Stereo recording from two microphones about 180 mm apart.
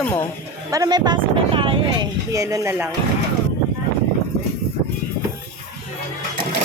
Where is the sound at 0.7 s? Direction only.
20° right (ahead or behind).